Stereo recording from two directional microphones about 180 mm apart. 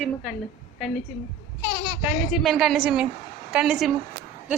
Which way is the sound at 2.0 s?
Centre (ahead or behind).